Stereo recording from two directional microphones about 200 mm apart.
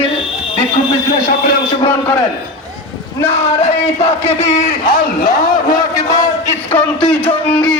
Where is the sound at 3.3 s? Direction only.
30° left (ahead or behind).